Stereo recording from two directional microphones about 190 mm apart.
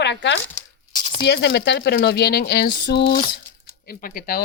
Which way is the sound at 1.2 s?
65° left (ahead or behind).